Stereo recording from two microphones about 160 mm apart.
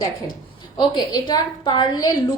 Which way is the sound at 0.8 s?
25° left (ahead or behind).